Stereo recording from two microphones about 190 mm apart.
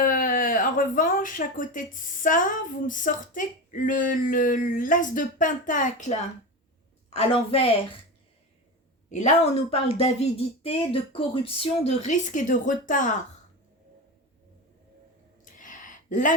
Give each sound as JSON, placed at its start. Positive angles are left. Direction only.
{"t": 0.0, "sound": "speech", "side_deg": 45}
{"t": 9.0, "sound": "speech", "side_deg": 40}
{"t": 15.4, "sound": "a sound", "side_deg": 45}